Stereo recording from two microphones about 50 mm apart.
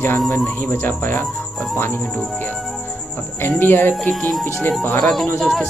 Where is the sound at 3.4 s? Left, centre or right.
Left.